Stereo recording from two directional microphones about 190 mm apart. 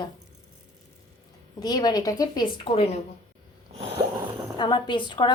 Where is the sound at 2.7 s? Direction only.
35° left (ahead or behind).